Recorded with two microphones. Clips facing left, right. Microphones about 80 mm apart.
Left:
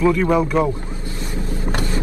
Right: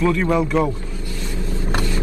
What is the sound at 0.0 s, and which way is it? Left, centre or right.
Speech, centre.